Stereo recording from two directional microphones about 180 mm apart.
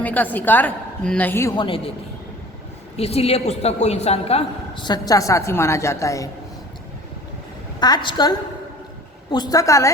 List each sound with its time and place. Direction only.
0.0 s a woman's voice: 10° left (ahead or behind)
1.5 s a woman's voice: 30° left (ahead or behind)
2.9 s a woman's voice: 35° left (ahead or behind); by 6.2 s 15° left (ahead or behind)
7.8 s a woman's voice: 25° left (ahead or behind)